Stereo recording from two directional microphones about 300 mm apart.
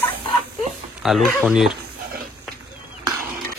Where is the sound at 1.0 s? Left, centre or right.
Centre.